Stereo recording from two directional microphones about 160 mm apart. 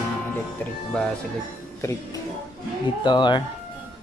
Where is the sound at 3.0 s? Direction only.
30° left (ahead or behind).